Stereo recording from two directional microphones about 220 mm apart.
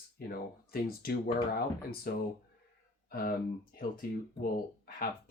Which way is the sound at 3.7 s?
40° left (ahead or behind).